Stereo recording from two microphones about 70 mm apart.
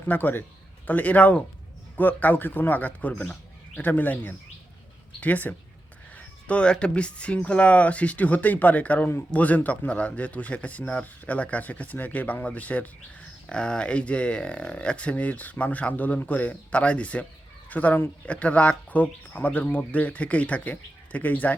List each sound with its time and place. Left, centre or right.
0.1 s speech: left